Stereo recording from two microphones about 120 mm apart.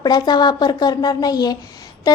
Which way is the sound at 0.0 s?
35° left (ahead or behind).